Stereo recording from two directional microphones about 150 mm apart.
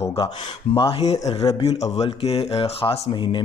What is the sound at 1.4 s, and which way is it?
Speech, 40° left (ahead or behind).